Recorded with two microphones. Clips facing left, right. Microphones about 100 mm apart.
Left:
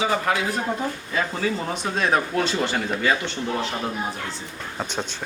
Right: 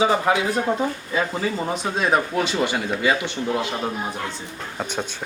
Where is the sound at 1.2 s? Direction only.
5° right (ahead or behind).